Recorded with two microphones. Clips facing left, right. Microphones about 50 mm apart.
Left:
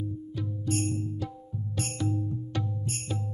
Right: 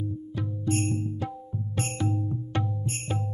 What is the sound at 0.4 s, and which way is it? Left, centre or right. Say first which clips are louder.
Music: right 2 dB; right.